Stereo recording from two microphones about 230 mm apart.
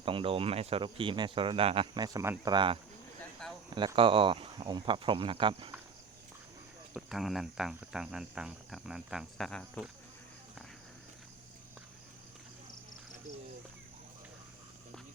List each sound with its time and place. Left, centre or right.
0.0 s speech: right
3.4 s insect: centre
3.8 s speech: right
6.9 s speech: centre